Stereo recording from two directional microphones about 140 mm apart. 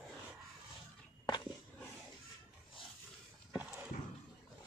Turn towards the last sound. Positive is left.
turn(degrees=-15)  # may be behind; listen again after turning